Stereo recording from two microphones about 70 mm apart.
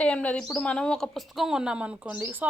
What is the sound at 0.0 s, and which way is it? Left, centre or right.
Speech, centre.